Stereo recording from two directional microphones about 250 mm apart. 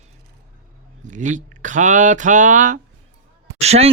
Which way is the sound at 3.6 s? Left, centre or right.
Right.